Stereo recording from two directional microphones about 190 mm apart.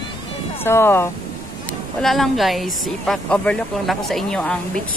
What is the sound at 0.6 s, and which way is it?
Speech, 15° left (ahead or behind).